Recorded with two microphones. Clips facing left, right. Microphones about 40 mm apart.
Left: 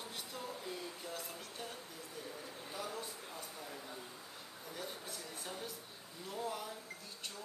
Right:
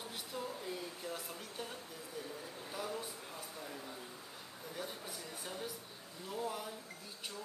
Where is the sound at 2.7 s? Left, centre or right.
Centre.